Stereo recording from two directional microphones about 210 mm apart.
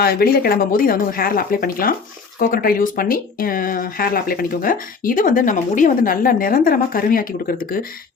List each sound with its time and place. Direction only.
0.0 s speech: 45° left (ahead or behind)